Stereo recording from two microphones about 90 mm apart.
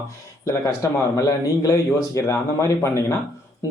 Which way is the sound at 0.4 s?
35° left (ahead or behind).